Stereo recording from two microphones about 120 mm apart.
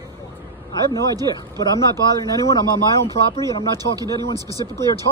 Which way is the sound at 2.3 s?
30° left (ahead or behind).